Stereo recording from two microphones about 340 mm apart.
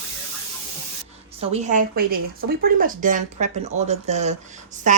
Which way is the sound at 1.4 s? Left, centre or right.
Centre.